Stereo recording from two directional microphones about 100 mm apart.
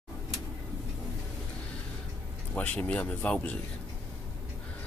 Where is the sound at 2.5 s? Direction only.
15° left (ahead or behind).